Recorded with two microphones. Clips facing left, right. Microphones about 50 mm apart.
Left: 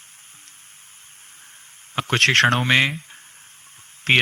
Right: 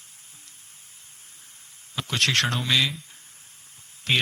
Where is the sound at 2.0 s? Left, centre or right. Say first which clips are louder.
Left 7 dB; left.